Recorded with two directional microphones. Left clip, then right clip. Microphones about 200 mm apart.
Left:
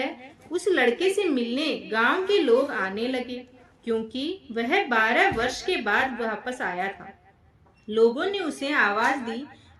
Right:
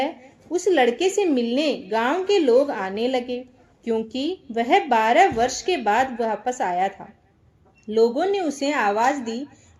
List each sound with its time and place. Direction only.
0.5 s a woman's voice: 15° right (ahead or behind)